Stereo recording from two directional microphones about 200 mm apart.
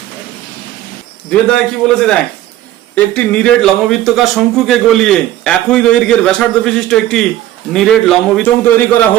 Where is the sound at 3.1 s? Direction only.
5° left (ahead or behind).